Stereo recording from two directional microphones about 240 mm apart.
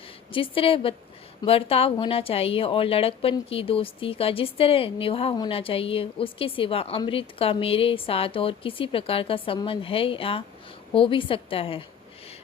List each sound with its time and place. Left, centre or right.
0.3 s speech: left